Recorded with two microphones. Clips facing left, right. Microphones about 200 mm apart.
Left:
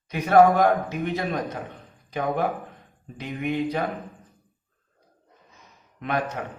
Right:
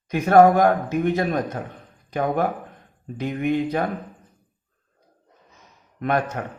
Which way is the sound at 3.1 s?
50° right (ahead or behind).